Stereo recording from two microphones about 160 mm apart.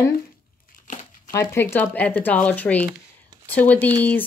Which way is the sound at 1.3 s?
15° left (ahead or behind).